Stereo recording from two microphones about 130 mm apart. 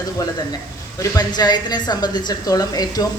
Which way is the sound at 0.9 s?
30° left (ahead or behind).